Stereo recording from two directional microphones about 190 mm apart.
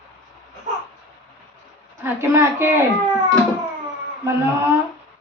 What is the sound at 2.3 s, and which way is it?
Speech, 10° right (ahead or behind).